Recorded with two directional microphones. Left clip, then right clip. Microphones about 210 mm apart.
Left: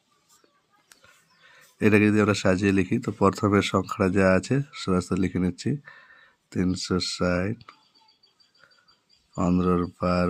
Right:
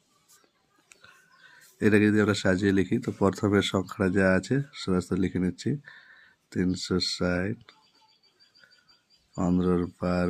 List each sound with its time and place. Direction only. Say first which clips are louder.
1.8 s speech: left 2 dB; 20° left (ahead or behind)
9.3 s speech: left 2 dB; 15° left (ahead or behind)